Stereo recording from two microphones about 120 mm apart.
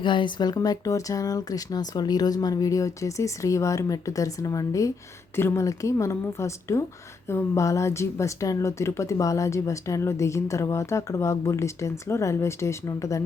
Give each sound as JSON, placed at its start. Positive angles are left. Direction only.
{"t": 0.0, "sound": "speech", "side_deg": 40}